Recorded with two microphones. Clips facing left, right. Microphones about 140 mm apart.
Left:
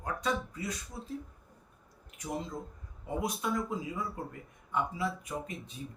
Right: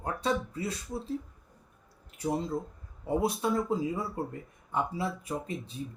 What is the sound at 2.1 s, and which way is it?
Speech, 30° right (ahead or behind).